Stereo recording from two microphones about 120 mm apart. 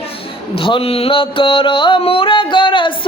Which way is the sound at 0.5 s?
50° left (ahead or behind).